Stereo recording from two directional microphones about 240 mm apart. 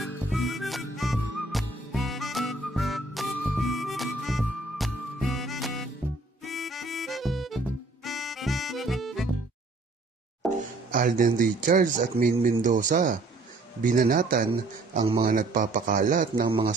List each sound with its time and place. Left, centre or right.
0.3 s music: centre
10.9 s speech: right
15.0 s a man's voice: centre
15.3 s speech: right